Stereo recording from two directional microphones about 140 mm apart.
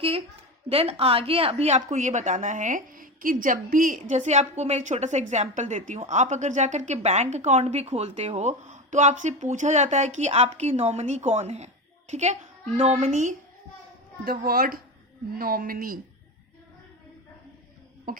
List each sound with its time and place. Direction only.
0.7 s a woman's voice: 45° right (ahead or behind)
13.1 s a child's voice: 65° right (ahead or behind)
14.3 s a woman's voice: 90° right
18.1 s a sound: 90° right